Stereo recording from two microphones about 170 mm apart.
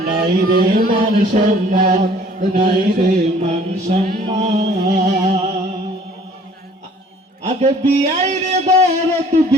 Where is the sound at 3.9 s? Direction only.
40° right (ahead or behind).